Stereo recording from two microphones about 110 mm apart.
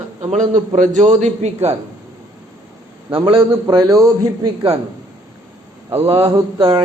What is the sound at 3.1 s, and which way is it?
Speech, 50° right (ahead or behind).